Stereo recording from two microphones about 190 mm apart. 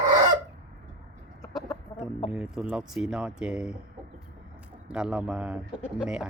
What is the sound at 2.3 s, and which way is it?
Speech, 5° right (ahead or behind).